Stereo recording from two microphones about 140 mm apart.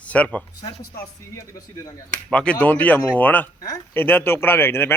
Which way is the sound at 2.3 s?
5° left (ahead or behind).